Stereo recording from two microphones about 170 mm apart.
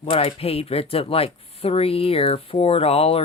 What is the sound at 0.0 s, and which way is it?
Speech, 35° left (ahead or behind).